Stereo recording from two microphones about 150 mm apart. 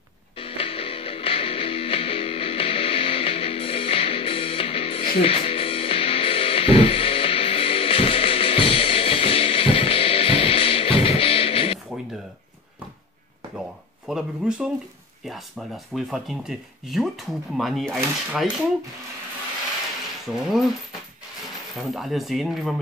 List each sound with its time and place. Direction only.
0.4 s music: 40° left (ahead or behind)
14.0 s speech: 5° right (ahead or behind)
17.9 s a sound: 10° right (ahead or behind)
20.3 s speech: 5° right (ahead or behind)
21.7 s speech: centre (ahead or behind)